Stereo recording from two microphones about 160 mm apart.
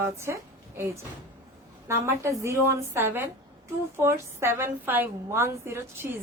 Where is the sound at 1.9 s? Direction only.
15° right (ahead or behind).